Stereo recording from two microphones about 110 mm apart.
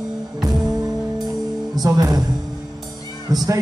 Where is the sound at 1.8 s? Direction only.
30° right (ahead or behind).